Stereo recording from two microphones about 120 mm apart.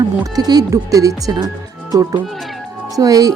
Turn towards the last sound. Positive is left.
turn(degrees=-30)  # may be behind; listen again after turning